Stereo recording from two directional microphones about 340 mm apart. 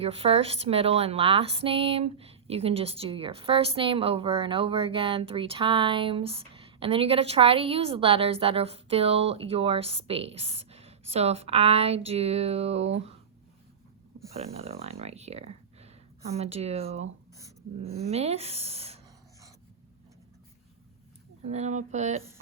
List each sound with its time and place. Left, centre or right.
0.0 s speech: centre
14.3 s speech: centre
21.4 s speech: centre